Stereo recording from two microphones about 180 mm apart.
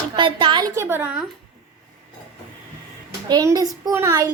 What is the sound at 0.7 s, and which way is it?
Speech, 10° right (ahead or behind).